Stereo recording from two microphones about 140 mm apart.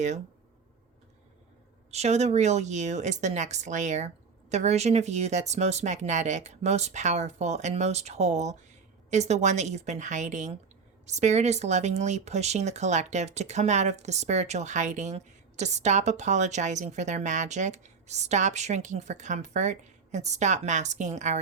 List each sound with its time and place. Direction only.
1.9 s speech: 50° right (ahead or behind)